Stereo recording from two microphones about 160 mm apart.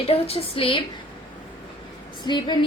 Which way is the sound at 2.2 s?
30° left (ahead or behind).